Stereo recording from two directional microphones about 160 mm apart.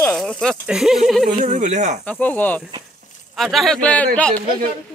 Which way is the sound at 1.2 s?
50° right (ahead or behind).